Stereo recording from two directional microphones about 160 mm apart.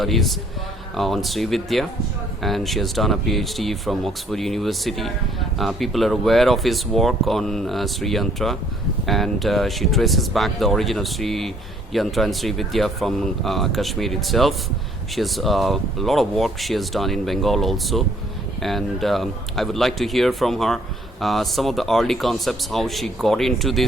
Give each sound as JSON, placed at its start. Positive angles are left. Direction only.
{"t": 0.0, "sound": "speech", "side_deg": 0}